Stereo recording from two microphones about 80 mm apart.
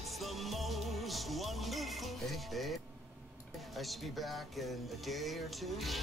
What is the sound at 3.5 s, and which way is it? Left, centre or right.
Speech, centre.